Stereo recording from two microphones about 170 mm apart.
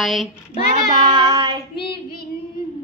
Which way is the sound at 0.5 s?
25° right (ahead or behind).